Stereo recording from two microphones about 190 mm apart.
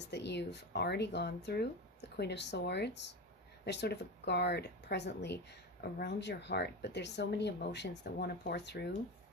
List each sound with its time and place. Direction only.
0.0 s speech: 65° left (ahead or behind)